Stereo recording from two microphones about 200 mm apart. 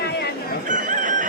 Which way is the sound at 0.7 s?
40° right (ahead or behind).